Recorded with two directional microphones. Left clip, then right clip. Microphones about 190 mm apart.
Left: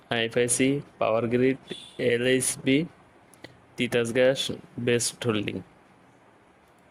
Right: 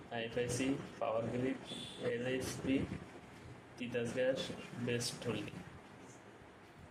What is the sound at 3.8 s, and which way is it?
Speech, 55° left (ahead or behind).